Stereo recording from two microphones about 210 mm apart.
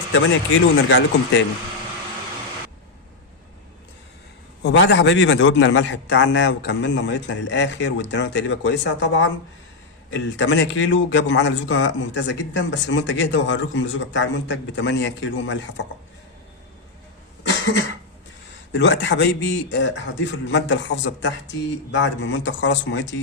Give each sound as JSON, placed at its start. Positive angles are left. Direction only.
{"t": 0.1, "sound": "a man's voice", "side_deg": 65}
{"t": 4.6, "sound": "a man's voice", "side_deg": 60}
{"t": 18.7, "sound": "a man's voice", "side_deg": 55}